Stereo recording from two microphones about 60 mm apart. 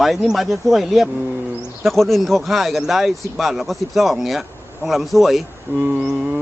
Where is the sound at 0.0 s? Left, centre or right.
Centre.